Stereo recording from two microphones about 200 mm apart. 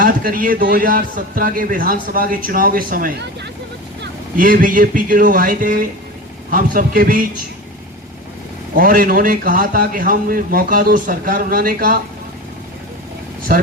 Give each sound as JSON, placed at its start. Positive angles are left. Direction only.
{"t": 0.0, "sound": "a man's voice", "side_deg": -45}
{"t": 8.7, "sound": "a man's voice", "side_deg": -45}
{"t": 13.5, "sound": "a man's voice", "side_deg": -45}